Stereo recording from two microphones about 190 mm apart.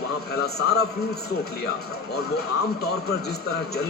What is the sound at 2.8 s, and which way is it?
Speech, 60° left (ahead or behind).